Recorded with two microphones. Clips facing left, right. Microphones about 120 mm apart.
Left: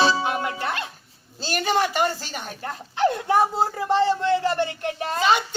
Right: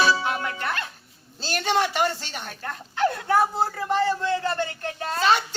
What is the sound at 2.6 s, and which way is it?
A man's voice, 25° left (ahead or behind).